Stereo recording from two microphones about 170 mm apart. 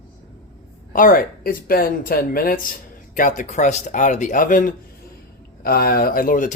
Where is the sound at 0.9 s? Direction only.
55° left (ahead or behind).